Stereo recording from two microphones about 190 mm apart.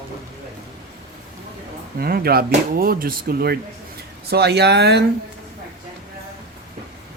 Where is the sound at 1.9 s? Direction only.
55° right (ahead or behind).